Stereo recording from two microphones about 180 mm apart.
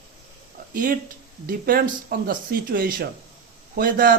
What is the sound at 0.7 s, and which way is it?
Speech, 50° right (ahead or behind).